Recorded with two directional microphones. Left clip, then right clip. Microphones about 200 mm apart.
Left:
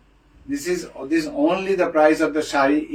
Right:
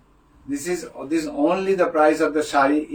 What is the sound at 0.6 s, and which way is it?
A man's voice, 30° right (ahead or behind).